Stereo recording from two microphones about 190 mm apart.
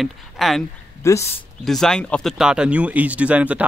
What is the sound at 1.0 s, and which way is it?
Speech, 15° left (ahead or behind).